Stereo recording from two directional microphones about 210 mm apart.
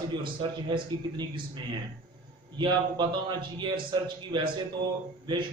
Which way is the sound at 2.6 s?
20° right (ahead or behind).